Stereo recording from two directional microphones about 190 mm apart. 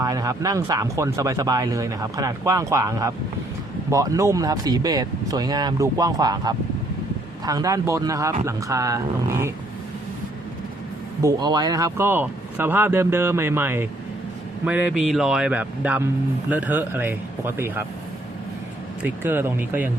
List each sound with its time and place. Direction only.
0.0 s speech: 20° right (ahead or behind)
11.2 s speech: 20° right (ahead or behind)
19.0 s speech: 10° right (ahead or behind)